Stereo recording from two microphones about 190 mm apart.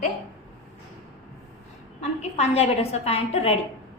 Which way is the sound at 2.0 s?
35° left (ahead or behind).